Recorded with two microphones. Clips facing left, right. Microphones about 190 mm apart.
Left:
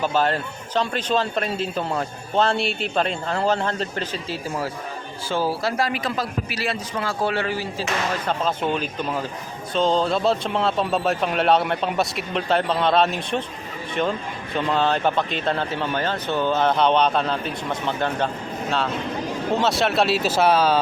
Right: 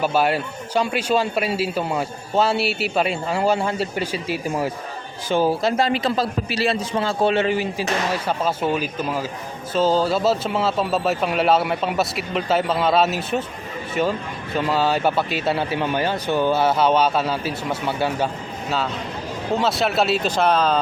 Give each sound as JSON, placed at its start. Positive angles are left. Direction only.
{"t": 0.0, "sound": "a man's voice", "side_deg": -10}
{"t": 19.5, "sound": "speech", "side_deg": 0}